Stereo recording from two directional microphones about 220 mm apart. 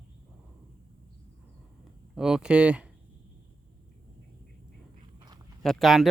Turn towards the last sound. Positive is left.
turn(degrees=0)  # may be behind; listen again after turning